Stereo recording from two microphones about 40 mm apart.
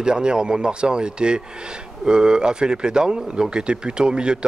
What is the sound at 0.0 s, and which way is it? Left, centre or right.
Speech, right.